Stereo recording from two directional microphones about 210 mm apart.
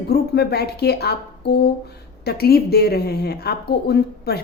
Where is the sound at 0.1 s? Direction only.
50° left (ahead or behind).